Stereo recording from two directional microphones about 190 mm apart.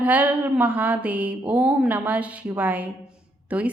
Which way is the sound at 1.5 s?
5° right (ahead or behind).